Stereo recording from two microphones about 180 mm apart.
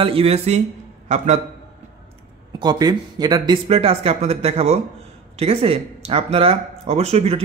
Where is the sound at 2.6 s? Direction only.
20° right (ahead or behind).